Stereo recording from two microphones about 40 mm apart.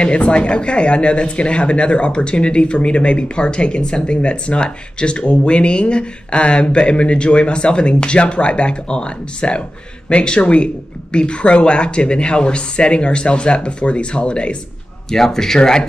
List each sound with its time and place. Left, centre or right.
0.0 s speech: left
15.0 s speech: centre